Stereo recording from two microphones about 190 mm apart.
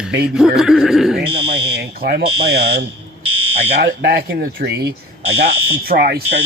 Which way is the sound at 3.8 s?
50° right (ahead or behind).